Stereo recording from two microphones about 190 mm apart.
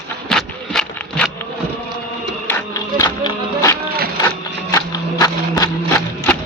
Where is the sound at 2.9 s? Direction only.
20° left (ahead or behind).